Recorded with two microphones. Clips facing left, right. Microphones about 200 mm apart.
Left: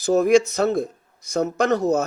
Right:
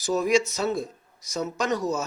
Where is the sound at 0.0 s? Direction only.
55° left (ahead or behind).